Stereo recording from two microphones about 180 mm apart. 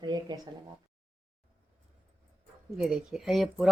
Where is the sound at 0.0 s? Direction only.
25° right (ahead or behind).